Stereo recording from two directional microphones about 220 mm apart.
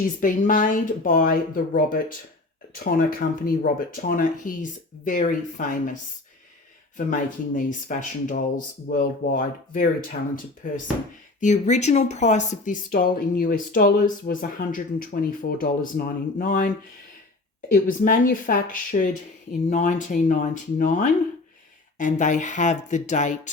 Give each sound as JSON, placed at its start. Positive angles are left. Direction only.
{"t": 0.2, "sound": "speech", "side_deg": 35}
{"t": 17.8, "sound": "speech", "side_deg": 40}